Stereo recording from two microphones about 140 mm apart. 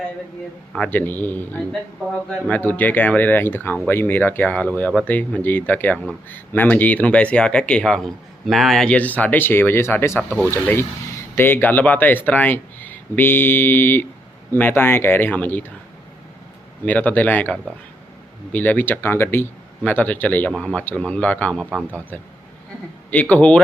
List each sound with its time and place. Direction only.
0.7 s speech: 10° left (ahead or behind)
10.2 s speech: 5° left (ahead or behind)
10.5 s speech: 15° left (ahead or behind)
16.8 s speech: 10° left (ahead or behind)
21.6 s a man's voice: 5° right (ahead or behind)
21.8 s speech: 10° left (ahead or behind)
23.3 s speech: 10° left (ahead or behind)